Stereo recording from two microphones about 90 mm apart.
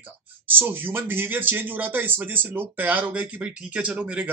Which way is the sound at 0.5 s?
25° right (ahead or behind).